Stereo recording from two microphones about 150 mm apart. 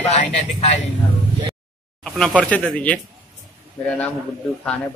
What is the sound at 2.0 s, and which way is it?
Speech, 5° left (ahead or behind).